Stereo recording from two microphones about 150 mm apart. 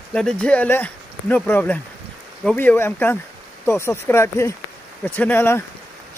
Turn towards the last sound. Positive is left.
turn(degrees=15)  # may be behind; listen again after turning